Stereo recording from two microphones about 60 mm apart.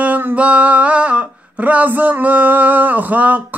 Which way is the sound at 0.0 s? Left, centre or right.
Right.